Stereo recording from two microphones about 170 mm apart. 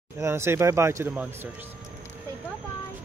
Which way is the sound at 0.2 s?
15° right (ahead or behind).